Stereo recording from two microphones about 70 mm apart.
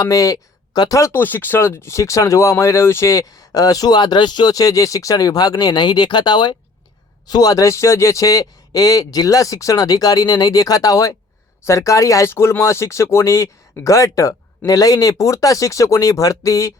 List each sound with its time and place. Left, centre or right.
0.0 s speech: left
1.1 s speech: left
7.3 s speech: left